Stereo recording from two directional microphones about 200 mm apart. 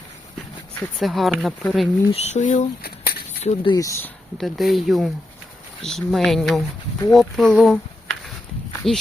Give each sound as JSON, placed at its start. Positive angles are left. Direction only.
{"t": 0.9, "sound": "speech", "side_deg": 0}
{"t": 2.0, "sound": "speech", "side_deg": 30}
{"t": 3.4, "sound": "speech", "side_deg": 25}
{"t": 4.4, "sound": "speech", "side_deg": 0}
{"t": 8.8, "sound": "speech", "side_deg": 0}